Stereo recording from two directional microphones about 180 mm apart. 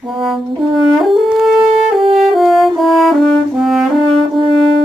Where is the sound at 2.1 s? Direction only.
Centre (ahead or behind).